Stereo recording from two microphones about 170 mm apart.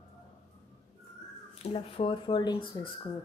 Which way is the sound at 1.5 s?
35° left (ahead or behind).